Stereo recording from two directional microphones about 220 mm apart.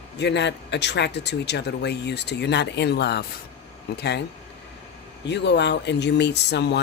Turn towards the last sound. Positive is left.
turn(degrees=50)  # may be behind; listen again after turning